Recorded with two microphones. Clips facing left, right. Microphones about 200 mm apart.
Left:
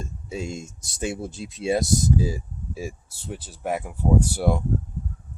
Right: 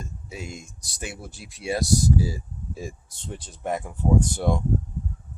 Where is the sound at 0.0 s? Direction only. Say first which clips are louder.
Left 5 dB; 25° left (ahead or behind); by 4.6 s 10° left (ahead or behind).